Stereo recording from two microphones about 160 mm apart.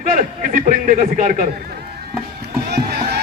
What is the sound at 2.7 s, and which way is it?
Rowboat, 90° right.